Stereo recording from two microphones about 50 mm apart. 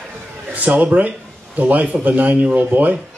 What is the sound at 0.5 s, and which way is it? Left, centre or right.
Speech, right.